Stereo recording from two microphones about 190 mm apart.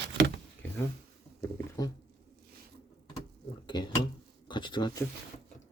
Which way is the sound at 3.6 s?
25° left (ahead or behind).